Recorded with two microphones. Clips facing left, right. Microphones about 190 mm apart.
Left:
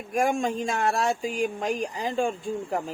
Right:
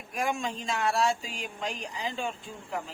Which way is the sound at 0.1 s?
50° left (ahead or behind).